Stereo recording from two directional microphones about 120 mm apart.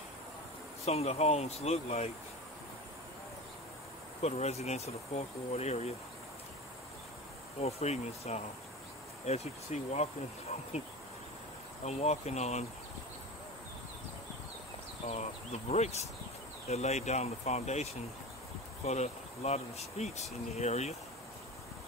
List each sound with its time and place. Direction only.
0.8 s speech: 60° left (ahead or behind)
4.2 s speech: 65° left (ahead or behind)
7.6 s speech: 60° left (ahead or behind)
11.8 s speech: 65° left (ahead or behind)
15.0 s speech: 70° left (ahead or behind)
18.9 s speech: 65° left (ahead or behind)